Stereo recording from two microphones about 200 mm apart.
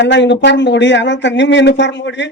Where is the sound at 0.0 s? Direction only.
60° left (ahead or behind).